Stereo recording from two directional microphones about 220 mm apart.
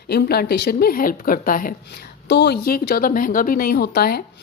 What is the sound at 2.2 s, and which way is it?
Speech, 50° left (ahead or behind).